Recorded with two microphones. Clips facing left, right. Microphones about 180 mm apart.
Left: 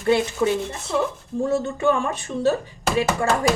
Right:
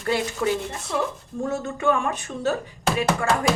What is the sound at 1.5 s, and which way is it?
A woman's voice, 30° left (ahead or behind).